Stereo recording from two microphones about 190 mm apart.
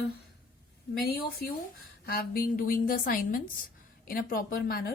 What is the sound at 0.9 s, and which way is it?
A woman's voice, 55° left (ahead or behind).